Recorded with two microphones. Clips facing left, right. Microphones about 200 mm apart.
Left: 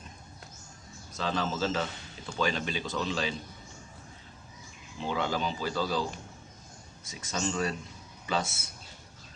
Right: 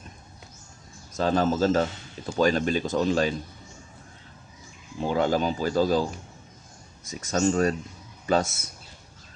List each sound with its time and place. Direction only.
1.1 s speech: 45° right (ahead or behind)
5.0 s speech: 45° right (ahead or behind)
7.1 s speech: 45° right (ahead or behind)